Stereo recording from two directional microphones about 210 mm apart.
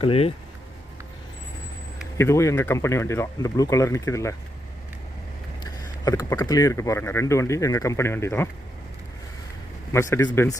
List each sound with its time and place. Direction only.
0.0 s speech: 25° left (ahead or behind)
2.1 s speech: 15° left (ahead or behind)
5.6 s speech: 15° left (ahead or behind)
9.9 s speech: 15° left (ahead or behind)